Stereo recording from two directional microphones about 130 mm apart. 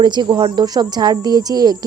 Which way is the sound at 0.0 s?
35° right (ahead or behind).